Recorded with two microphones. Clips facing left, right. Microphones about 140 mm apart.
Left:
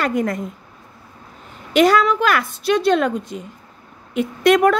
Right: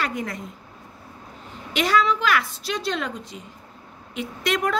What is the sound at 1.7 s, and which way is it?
A woman's voice, 50° left (ahead or behind).